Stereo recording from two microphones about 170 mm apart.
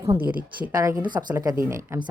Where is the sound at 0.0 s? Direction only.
20° right (ahead or behind).